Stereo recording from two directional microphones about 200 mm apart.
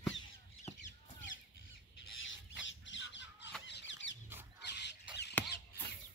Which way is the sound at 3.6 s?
60° left (ahead or behind).